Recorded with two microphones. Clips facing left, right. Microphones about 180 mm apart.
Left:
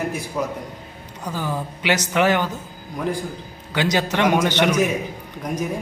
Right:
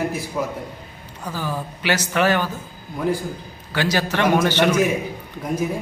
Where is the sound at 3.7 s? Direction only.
20° left (ahead or behind).